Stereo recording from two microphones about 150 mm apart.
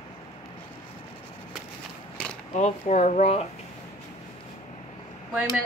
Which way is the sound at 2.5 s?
50° left (ahead or behind).